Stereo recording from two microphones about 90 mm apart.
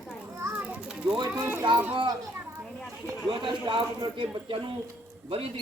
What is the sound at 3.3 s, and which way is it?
Speech, 60° right (ahead or behind).